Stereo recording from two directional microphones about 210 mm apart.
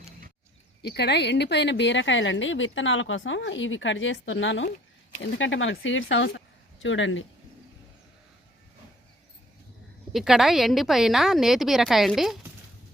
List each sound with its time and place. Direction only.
0.8 s a woman's voice: 50° left (ahead or behind)
10.1 s a woman's voice: centre (ahead or behind)